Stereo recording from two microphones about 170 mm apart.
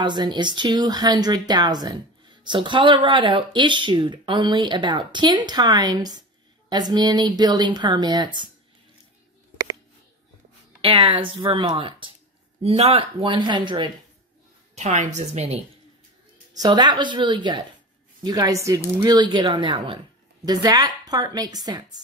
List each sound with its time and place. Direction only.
0.0 s speech: 25° right (ahead or behind)
10.8 s speech: 30° right (ahead or behind)
14.8 s speech: 45° right (ahead or behind)
16.5 s speech: 25° right (ahead or behind)